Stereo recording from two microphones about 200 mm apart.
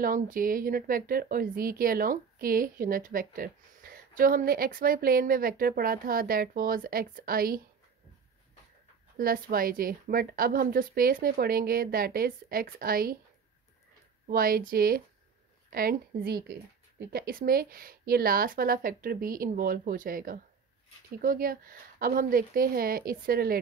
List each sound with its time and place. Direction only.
0.0 s a woman's voice: 45° right (ahead or behind)
9.1 s a woman's voice: 45° right (ahead or behind)
14.2 s a woman's voice: 45° right (ahead or behind)